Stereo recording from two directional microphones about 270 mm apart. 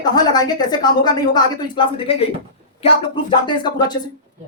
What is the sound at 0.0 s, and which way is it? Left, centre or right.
A woman's voice, centre.